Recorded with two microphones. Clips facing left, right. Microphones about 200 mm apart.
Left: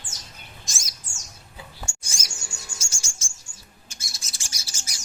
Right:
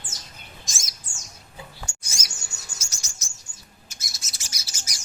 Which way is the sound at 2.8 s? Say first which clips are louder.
Left 1 dB; 30° left (ahead or behind).